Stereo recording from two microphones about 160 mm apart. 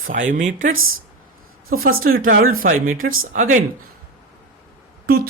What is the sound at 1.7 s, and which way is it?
Speech, 65° right (ahead or behind).